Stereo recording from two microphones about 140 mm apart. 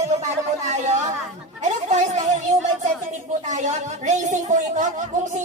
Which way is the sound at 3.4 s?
60° right (ahead or behind).